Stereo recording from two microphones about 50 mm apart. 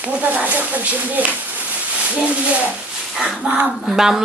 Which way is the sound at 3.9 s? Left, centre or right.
Centre.